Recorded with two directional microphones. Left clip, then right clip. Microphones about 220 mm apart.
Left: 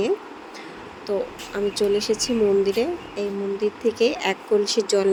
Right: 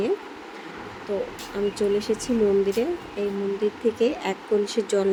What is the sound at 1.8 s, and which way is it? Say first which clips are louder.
Speech: left 4 dB; 25° left (ahead or behind).